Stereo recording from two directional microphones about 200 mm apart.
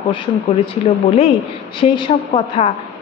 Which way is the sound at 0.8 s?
30° left (ahead or behind).